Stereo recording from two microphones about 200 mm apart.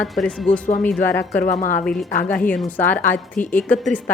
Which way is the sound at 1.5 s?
40° left (ahead or behind).